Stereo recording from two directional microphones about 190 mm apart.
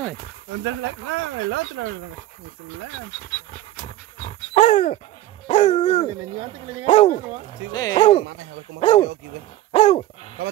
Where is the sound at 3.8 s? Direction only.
35° left (ahead or behind).